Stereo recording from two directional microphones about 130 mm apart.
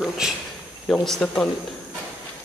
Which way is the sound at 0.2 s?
5° right (ahead or behind).